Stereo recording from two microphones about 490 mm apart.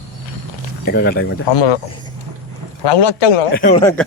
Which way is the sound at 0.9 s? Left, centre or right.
Centre.